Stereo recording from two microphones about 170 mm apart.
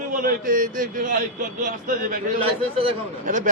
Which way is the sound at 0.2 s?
55° right (ahead or behind).